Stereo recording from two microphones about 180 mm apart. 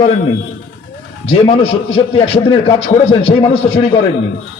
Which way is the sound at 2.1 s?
30° left (ahead or behind).